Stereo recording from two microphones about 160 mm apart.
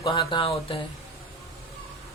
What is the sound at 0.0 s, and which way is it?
Mantra, 30° left (ahead or behind).